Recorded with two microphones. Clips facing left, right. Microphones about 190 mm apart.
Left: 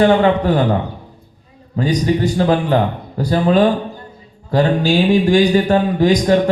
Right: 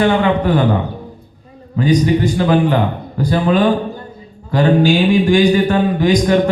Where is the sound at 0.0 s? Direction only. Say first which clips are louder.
Left 1 dB; 35° left (ahead or behind).